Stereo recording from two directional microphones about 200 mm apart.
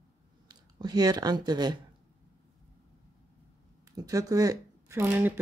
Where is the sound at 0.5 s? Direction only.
20° right (ahead or behind).